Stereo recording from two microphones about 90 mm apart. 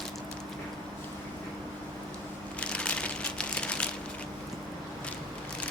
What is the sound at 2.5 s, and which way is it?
Crushing, 10° left (ahead or behind).